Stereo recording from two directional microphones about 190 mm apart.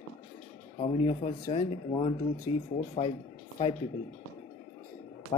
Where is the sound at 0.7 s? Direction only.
30° left (ahead or behind).